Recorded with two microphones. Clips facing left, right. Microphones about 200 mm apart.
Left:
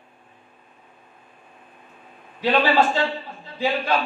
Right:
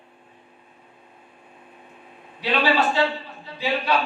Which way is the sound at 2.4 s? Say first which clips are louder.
Left 3 dB; 50° left (ahead or behind).